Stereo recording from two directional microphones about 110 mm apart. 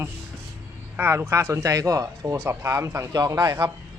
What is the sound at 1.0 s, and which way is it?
Speech, 20° right (ahead or behind).